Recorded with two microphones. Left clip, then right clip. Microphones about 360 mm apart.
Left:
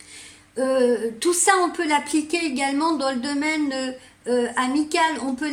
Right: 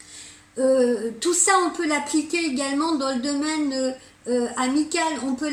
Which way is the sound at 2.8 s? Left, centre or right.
Left.